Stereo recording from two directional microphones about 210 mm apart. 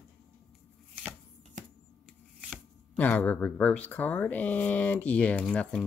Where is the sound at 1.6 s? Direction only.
35° right (ahead or behind).